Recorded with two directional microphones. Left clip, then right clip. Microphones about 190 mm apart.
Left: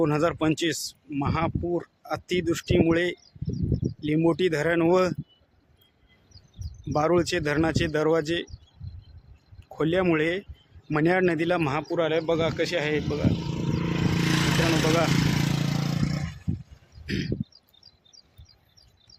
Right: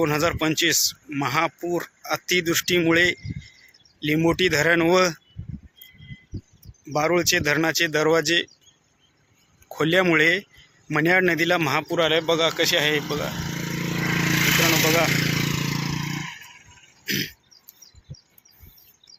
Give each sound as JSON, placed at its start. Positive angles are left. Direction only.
{"t": 0.0, "sound": "speech", "side_deg": 15}
{"t": 6.9, "sound": "speech", "side_deg": 10}
{"t": 9.7, "sound": "speech", "side_deg": 0}
{"t": 13.4, "sound": "vehicle", "side_deg": -30}
{"t": 14.1, "sound": "a sound", "side_deg": 10}
{"t": 14.8, "sound": "speech", "side_deg": 5}
{"t": 15.1, "sound": "vehicle", "side_deg": 60}